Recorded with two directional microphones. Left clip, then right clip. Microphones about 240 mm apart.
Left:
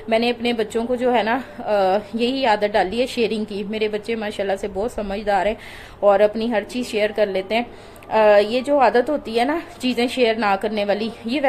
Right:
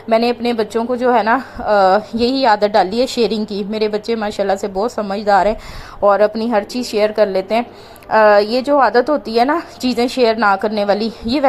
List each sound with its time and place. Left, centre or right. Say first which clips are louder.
0.1 s a woman's voice: right 5 dB; centre